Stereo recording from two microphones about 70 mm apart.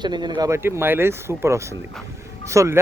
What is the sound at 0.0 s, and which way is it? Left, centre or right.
Speech, right.